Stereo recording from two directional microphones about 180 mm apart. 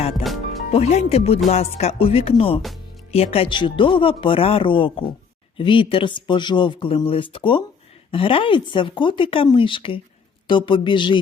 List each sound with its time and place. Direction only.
0.7 s music: 35° left (ahead or behind)
3.1 s speech: 35° left (ahead or behind)